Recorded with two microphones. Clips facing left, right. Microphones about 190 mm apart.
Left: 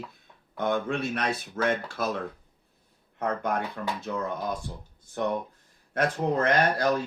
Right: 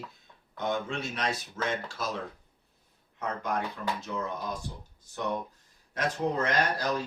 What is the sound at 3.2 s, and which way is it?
Speech, 55° left (ahead or behind).